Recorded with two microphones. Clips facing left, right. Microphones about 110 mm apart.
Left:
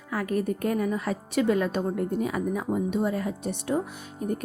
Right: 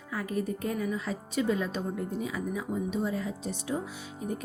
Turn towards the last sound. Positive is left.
turn(degrees=55)  # may be behind; listen again after turning